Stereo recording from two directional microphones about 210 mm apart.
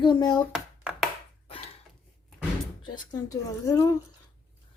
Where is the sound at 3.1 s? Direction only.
15° left (ahead or behind).